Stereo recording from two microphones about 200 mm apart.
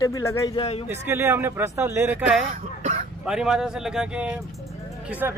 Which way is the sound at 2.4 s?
35° right (ahead or behind).